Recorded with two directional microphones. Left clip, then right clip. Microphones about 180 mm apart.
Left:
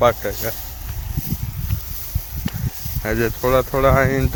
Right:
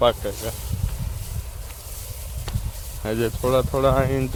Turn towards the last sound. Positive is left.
turn(degrees=25)  # may be behind; listen again after turning